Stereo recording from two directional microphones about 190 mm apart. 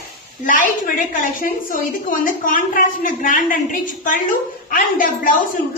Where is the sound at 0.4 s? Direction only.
45° left (ahead or behind).